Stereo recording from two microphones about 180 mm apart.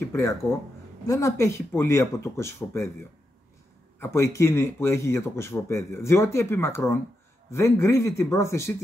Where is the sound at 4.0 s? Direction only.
15° left (ahead or behind).